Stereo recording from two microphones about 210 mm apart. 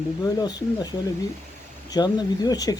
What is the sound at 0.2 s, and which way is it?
Speech, 20° left (ahead or behind).